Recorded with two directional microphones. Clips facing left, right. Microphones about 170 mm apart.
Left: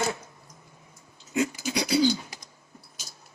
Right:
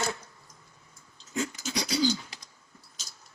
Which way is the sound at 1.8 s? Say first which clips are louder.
Left 6 dB; 60° left (ahead or behind).